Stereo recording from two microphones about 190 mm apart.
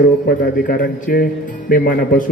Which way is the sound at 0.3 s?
45° left (ahead or behind).